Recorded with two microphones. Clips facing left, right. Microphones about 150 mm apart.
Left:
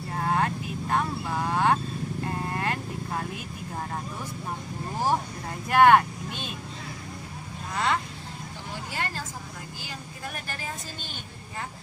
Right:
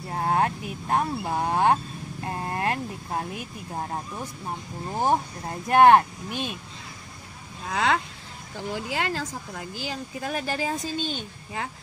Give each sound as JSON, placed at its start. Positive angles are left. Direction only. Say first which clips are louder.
{"t": 0.1, "sound": "speech", "louder": "right 2 dB", "side_deg": -30}
{"t": 2.2, "sound": "vehicle", "louder": "right 4 dB", "side_deg": -35}
{"t": 3.7, "sound": "speech", "louder": "right 3 dB", "side_deg": -30}
{"t": 7.7, "sound": "speech", "louder": "right 3 dB", "side_deg": -90}